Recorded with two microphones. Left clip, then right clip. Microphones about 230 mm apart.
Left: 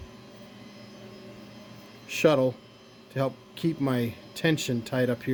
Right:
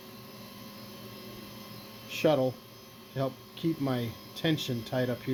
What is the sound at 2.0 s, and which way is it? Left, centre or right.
Speech, left.